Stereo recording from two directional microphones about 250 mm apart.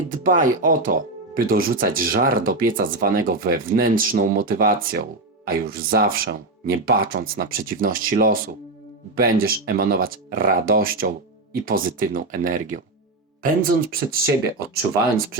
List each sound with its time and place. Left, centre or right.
0.1 s speech: right